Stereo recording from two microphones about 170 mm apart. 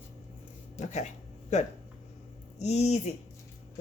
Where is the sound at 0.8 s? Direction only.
45° left (ahead or behind).